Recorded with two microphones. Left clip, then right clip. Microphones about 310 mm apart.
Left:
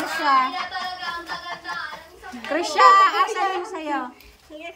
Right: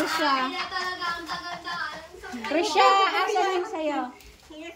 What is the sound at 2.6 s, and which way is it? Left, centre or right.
Speech, centre.